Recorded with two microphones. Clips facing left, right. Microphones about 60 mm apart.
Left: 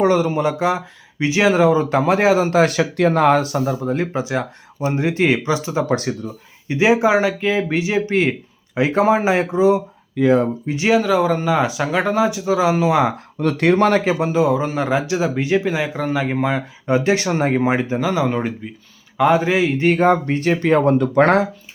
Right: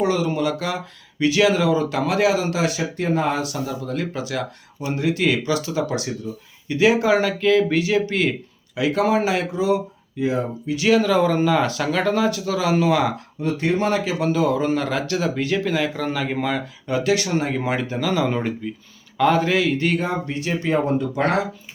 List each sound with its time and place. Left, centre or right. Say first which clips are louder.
0.0 s speech: left 5 dB; left
0.3 s speech: left 5 dB; left
2.7 s speech: left 6 dB; left
3.4 s speech: left 6 dB; left
6.0 s speech: left 3 dB; left
6.7 s speech: left 2 dB; left
10.2 s speech: left 7 dB; left
10.7 s speech: even; left
11.0 s speech: left 1 dB; centre
13.4 s speech: left 6 dB; left
14.3 s speech: left 1 dB; centre; by 17.6 s left
17.6 s speech: left 5 dB; left
20.0 s speech: left 9 dB; left